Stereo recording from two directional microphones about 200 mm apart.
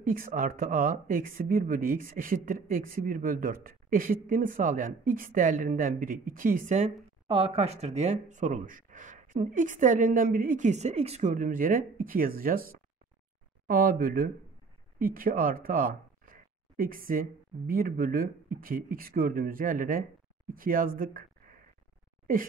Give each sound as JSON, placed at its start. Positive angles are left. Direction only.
{"t": 0.0, "sound": "speech", "side_deg": -45}